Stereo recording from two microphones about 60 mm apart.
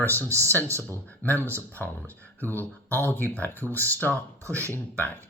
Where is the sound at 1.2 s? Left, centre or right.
Left.